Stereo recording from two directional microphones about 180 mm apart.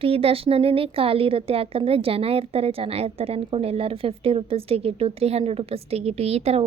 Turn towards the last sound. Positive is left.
turn(degrees=-35)  # may be behind; listen again after turning